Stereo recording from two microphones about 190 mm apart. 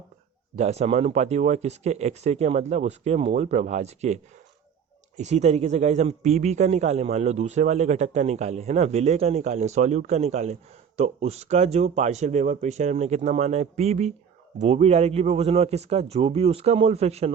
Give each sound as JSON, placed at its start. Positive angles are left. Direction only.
{"t": 0.5, "sound": "speech", "side_deg": -35}